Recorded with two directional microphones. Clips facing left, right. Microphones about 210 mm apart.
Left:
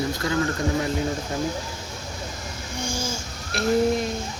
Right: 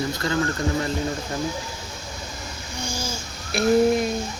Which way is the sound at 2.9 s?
50° left (ahead or behind).